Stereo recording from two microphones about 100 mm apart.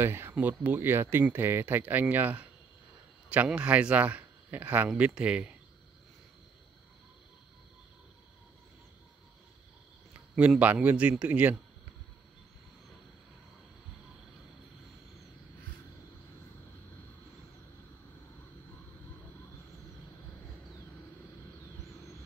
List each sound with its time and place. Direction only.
0.0 s a man's voice: 25° right (ahead or behind)
10.6 s speech: 15° right (ahead or behind)